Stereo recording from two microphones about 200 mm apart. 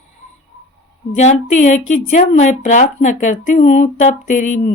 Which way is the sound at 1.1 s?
35° left (ahead or behind).